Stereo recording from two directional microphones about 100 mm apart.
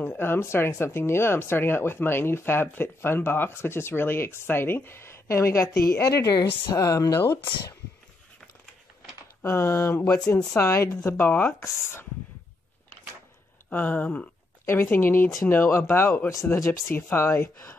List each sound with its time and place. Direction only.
0.1 s speech: 25° left (ahead or behind)
7.2 s speech: 25° left (ahead or behind)
9.4 s speech: 25° left (ahead or behind)
13.7 s speech: 15° left (ahead or behind)